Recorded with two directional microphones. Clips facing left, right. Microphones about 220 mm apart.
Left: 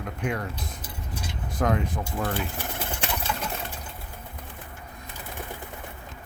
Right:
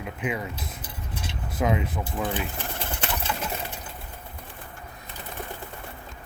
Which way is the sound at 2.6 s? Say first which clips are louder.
Even; 10° left (ahead or behind).